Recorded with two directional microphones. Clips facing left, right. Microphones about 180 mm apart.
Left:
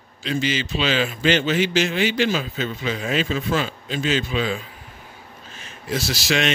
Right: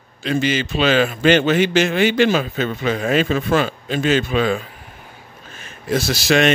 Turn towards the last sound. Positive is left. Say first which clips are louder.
# right 6 dB
turn(degrees=-50)  # may be behind; listen again after turning